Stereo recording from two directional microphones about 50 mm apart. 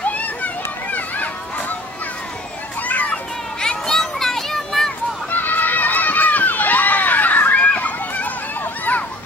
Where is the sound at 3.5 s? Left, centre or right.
Centre.